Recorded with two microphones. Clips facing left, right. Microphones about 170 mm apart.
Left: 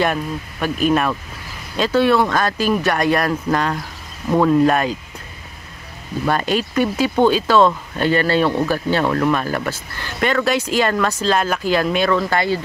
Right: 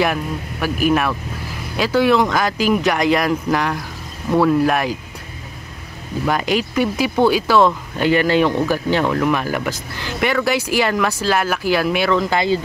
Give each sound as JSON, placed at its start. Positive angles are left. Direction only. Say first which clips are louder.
{"t": 0.0, "sound": "speech", "louder": "even", "side_deg": -10}
{"t": 6.2, "sound": "speech", "louder": "even", "side_deg": -10}